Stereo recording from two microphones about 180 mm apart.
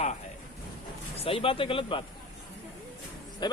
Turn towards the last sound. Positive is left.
turn(degrees=25)  # may be behind; listen again after turning